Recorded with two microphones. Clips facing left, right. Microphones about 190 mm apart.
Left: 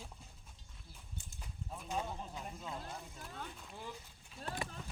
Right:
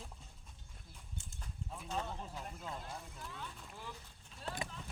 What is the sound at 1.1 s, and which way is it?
Livestock, 5° left (ahead or behind).